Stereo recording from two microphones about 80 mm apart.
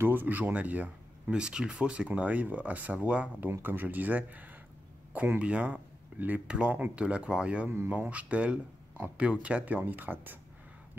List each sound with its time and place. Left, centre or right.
0.0 s speech: right